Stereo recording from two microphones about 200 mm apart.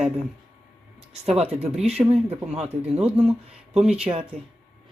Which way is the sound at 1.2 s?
30° right (ahead or behind).